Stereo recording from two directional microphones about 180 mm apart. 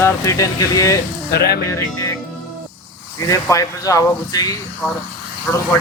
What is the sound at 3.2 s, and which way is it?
Speech, 20° left (ahead or behind).